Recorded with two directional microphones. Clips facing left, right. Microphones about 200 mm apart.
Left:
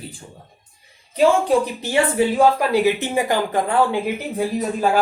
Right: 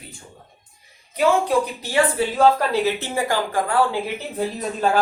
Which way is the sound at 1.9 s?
15° left (ahead or behind).